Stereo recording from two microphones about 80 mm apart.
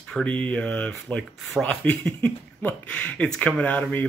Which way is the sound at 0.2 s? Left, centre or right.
Centre.